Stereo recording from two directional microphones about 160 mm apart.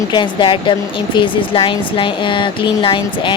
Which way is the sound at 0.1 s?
30° left (ahead or behind).